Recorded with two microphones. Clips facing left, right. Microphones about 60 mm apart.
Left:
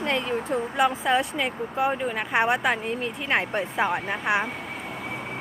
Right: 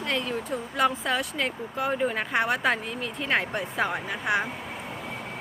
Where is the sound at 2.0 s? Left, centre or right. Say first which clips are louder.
Right 1 dB; centre.